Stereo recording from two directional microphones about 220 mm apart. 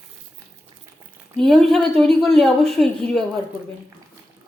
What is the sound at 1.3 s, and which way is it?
Speech, centre (ahead or behind).